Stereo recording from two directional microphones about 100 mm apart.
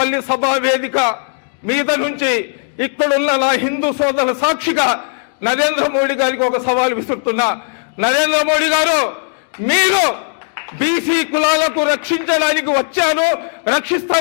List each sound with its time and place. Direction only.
0.0 s a man's voice: 20° left (ahead or behind)